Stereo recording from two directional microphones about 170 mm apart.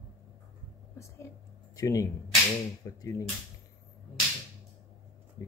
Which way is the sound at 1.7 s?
20° left (ahead or behind).